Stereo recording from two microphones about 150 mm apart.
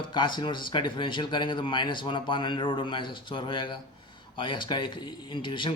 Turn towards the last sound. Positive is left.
turn(degrees=35)  # may be behind; listen again after turning